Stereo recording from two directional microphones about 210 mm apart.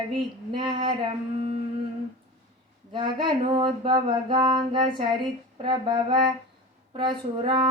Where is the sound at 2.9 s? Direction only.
20° right (ahead or behind).